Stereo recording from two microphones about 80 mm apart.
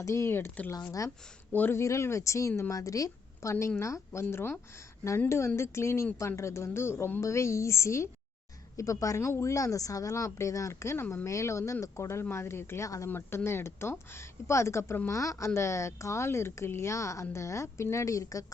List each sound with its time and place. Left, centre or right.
0.0 s a woman's voice: left
0.8 s speech: left
1.5 s speech: left
1.8 s a woman's voice: left